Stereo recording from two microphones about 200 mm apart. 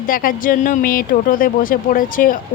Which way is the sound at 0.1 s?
45° left (ahead or behind).